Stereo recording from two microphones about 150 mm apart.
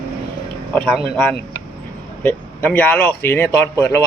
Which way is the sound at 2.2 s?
15° left (ahead or behind).